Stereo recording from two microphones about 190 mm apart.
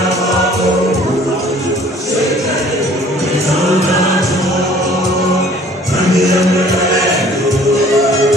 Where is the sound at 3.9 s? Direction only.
15° left (ahead or behind).